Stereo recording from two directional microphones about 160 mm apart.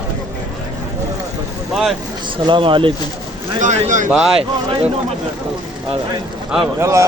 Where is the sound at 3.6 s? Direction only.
50° right (ahead or behind).